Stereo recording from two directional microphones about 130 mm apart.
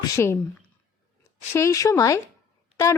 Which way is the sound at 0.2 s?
15° left (ahead or behind).